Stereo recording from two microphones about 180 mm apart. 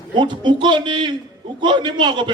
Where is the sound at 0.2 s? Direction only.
25° right (ahead or behind).